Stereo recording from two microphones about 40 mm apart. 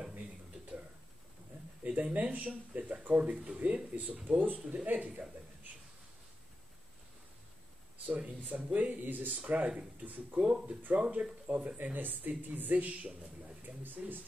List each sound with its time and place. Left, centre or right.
1.8 s a sound: right
2.1 s speech: right
4.8 s speech: right
8.1 s speech: right
10.4 s speech: right
11.4 s speech: right